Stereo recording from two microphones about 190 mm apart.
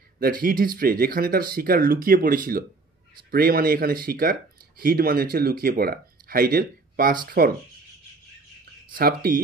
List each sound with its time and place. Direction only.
0.2 s speech: 45° right (ahead or behind)
8.9 s speech: 50° right (ahead or behind)